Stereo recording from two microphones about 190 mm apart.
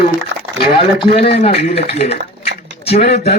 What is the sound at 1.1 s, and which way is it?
A man's voice, 30° left (ahead or behind).